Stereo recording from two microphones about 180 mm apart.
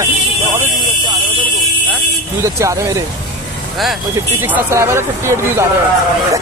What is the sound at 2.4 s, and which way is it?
Speech, 15° right (ahead or behind).